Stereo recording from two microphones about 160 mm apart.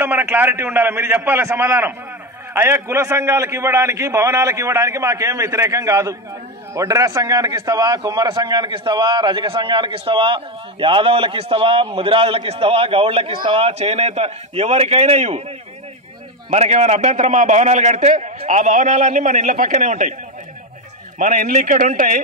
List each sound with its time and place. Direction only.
0.0 s a man's voice: 15° right (ahead or behind); by 15.4 s 40° right (ahead or behind)
16.4 s a man's voice: 45° right (ahead or behind)
21.2 s a man's voice: 55° right (ahead or behind)